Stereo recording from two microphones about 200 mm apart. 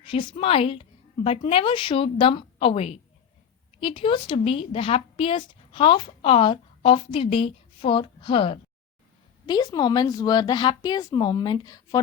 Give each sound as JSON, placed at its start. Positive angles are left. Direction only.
{"t": 0.1, "sound": "a woman's voice", "side_deg": 25}